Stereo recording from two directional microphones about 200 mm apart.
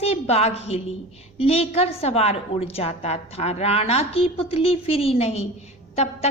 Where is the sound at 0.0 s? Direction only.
30° left (ahead or behind).